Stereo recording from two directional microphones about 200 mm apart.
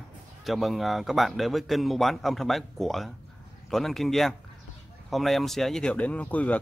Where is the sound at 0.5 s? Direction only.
Centre (ahead or behind).